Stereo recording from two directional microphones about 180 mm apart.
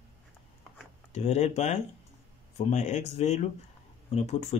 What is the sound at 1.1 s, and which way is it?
Speech, 40° left (ahead or behind).